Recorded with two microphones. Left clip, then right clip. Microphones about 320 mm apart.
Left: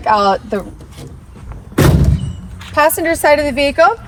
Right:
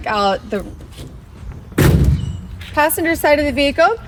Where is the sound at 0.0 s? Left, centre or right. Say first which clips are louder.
Left 5 dB; centre.